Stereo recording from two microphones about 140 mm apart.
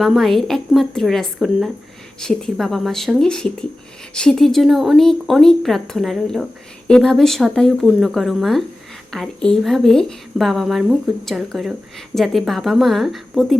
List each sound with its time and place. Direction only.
0.0 s speech: centre (ahead or behind)